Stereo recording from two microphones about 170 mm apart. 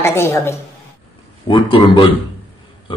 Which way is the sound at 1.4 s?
30° left (ahead or behind).